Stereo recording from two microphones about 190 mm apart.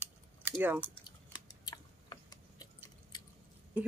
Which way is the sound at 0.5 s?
10° right (ahead or behind).